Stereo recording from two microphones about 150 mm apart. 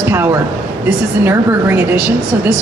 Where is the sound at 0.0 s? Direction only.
15° right (ahead or behind).